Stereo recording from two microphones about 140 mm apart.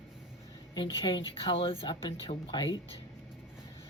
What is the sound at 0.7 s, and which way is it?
Speech, 35° left (ahead or behind).